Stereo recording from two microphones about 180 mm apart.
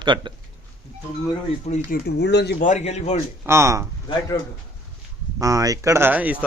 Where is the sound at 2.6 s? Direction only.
40° left (ahead or behind).